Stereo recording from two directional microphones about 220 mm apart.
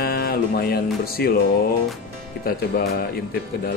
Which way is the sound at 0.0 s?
45° left (ahead or behind).